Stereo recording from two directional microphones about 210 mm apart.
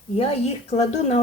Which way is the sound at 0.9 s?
30° left (ahead or behind).